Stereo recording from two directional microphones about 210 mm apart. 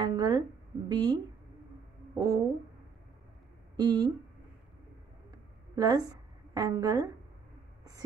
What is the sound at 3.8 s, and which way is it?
Speech, 20° right (ahead or behind).